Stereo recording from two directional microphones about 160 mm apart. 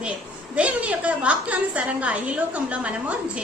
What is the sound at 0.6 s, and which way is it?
A woman's voice, 10° right (ahead or behind).